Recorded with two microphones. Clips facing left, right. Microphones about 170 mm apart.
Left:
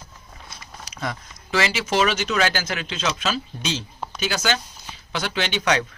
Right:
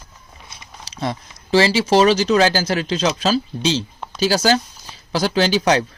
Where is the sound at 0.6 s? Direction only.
30° right (ahead or behind).